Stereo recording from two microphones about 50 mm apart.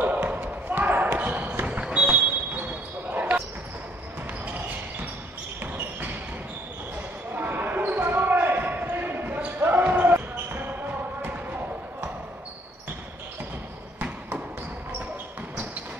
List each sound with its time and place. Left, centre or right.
0.0 s basketball bounce: right
5.6 s basketball bounce: right
7.3 s basketball bounce: right